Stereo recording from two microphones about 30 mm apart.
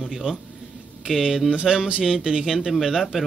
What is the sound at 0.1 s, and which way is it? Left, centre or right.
Speech, centre.